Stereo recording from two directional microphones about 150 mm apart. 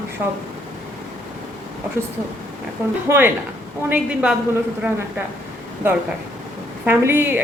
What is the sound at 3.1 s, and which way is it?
A woman's voice, 15° right (ahead or behind).